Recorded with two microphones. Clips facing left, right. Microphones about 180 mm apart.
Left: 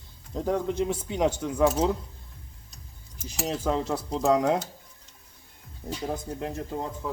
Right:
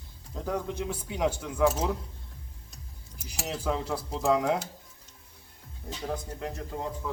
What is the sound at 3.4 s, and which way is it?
Speech, 25° left (ahead or behind).